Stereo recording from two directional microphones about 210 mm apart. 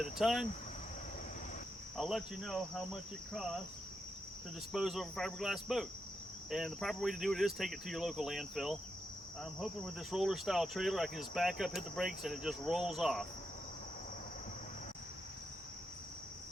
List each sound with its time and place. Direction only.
0.0 s speech: centre (ahead or behind)
2.0 s speech: centre (ahead or behind)
4.7 s speech: centre (ahead or behind)